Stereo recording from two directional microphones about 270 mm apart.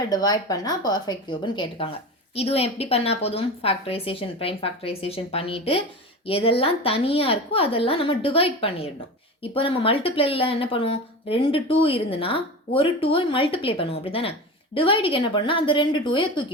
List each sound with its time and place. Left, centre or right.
0.1 s a woman's voice: centre